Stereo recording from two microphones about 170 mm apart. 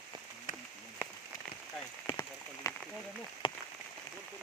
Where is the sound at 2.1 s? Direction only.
25° left (ahead or behind).